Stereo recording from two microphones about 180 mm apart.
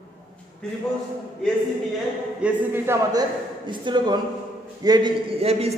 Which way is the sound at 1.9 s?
10° right (ahead or behind).